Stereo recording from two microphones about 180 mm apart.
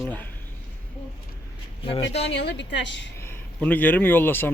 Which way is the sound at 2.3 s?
75° left (ahead or behind).